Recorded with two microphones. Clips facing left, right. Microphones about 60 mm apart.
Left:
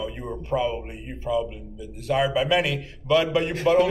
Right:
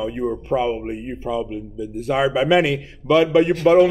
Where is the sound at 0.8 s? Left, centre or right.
Right.